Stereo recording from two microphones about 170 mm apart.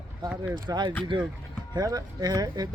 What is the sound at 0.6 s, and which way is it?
Speech, 25° right (ahead or behind).